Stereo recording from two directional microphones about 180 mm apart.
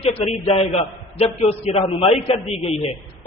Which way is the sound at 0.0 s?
35° left (ahead or behind).